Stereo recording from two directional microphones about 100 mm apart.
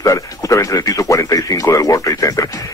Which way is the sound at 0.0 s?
35° left (ahead or behind).